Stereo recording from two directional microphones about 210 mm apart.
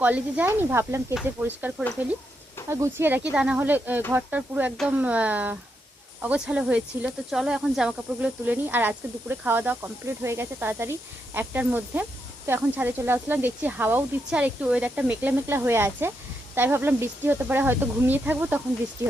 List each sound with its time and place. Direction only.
0.0 s speech: 5° right (ahead or behind)